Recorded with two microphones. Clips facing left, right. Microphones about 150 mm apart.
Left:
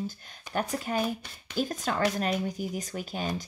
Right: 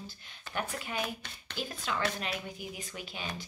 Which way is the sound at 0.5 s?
40° left (ahead or behind).